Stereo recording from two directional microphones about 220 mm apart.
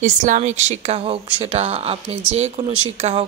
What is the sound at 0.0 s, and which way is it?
Speech, 35° right (ahead or behind).